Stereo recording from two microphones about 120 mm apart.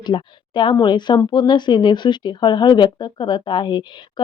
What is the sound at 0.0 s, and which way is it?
Speech, 40° left (ahead or behind).